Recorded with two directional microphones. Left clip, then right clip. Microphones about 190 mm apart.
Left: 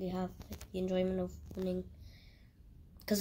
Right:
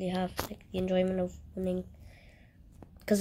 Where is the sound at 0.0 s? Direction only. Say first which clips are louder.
Right 7 dB; 40° right (ahead or behind).